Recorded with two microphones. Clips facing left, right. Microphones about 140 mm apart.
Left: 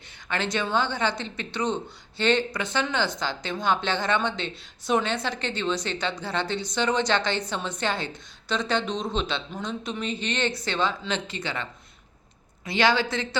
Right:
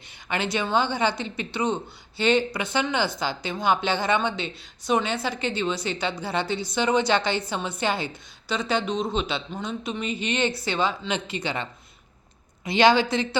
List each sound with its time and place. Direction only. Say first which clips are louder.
0.3 s a woman's voice: right 1 dB; 10° right (ahead or behind)